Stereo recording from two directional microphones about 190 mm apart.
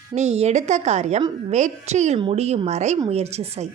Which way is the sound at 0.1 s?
35° right (ahead or behind).